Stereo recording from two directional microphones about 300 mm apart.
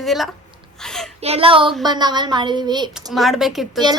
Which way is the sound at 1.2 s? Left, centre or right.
Centre.